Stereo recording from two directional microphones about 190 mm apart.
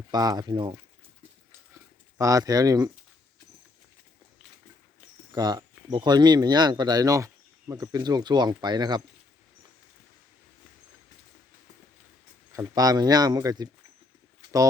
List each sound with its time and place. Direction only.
0.1 s speech: 20° right (ahead or behind)
2.1 s speech: 20° right (ahead or behind)
5.3 s speech: 20° right (ahead or behind)
12.5 s speech: 20° right (ahead or behind)